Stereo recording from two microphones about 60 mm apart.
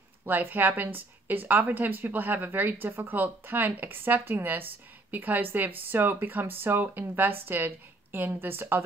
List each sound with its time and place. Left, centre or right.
0.2 s a woman's voice: right